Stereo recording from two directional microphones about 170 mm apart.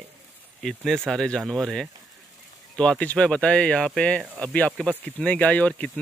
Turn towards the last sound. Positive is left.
turn(degrees=10)  # may be behind; listen again after turning